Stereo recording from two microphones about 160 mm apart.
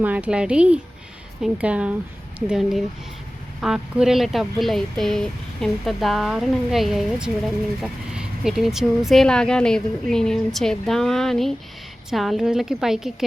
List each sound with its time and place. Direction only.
0.0 s speech: 10° right (ahead or behind)